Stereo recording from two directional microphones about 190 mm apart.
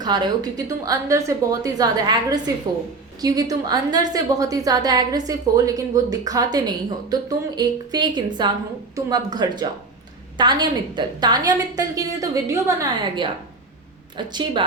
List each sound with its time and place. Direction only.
0.0 s a woman's voice: 20° right (ahead or behind)